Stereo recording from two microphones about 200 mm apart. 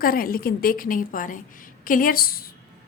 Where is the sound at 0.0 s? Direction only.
45° left (ahead or behind).